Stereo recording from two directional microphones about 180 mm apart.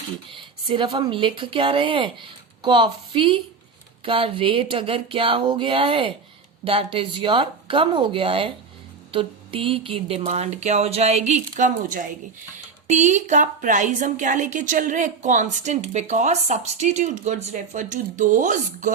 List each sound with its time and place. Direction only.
0.3 s speech: 30° right (ahead or behind)
4.0 s a sound: 30° right (ahead or behind)
9.1 s a woman's voice: 30° right (ahead or behind)